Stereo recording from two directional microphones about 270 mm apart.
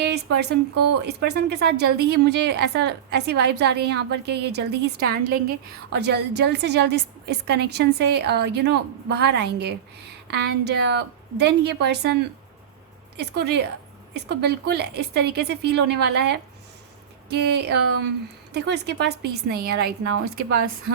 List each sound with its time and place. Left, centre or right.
0.1 s a woman's voice: right
13.1 s a woman's voice: right